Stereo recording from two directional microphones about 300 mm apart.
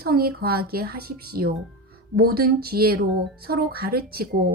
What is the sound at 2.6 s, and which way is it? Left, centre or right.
A woman's voice, right.